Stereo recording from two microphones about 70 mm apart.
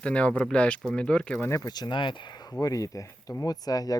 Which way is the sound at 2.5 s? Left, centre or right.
Left.